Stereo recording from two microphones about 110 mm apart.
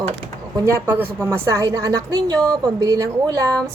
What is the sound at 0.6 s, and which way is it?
A woman's voice, 20° right (ahead or behind).